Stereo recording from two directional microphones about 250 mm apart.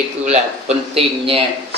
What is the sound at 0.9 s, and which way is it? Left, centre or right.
Speech, right.